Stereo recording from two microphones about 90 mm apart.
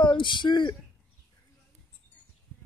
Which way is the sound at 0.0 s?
65° left (ahead or behind).